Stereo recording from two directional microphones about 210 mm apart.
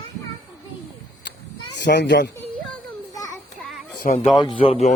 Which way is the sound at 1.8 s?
55° left (ahead or behind).